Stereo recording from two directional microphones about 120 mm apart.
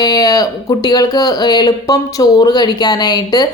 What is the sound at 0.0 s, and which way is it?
Speech, 30° left (ahead or behind).